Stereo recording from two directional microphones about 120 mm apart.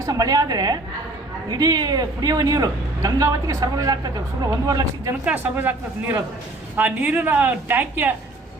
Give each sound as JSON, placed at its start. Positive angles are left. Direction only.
{"t": 0.0, "sound": "a man's voice", "side_deg": -30}
{"t": 5.2, "sound": "speech", "side_deg": -15}